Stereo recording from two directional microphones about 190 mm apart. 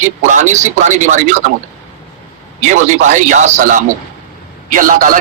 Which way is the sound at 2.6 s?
40° right (ahead or behind).